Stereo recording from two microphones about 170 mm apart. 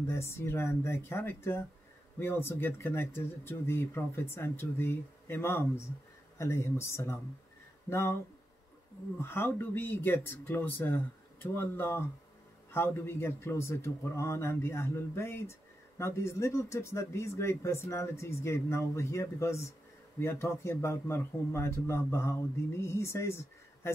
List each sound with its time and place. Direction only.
0.0 s speech: 15° left (ahead or behind)
9.2 s speech: 15° left (ahead or behind)